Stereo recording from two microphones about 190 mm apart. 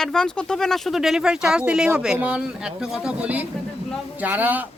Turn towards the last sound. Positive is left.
turn(degrees=-10)  # may be behind; listen again after turning